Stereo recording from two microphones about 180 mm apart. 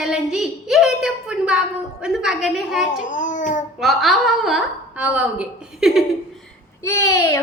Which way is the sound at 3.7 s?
Centre (ahead or behind).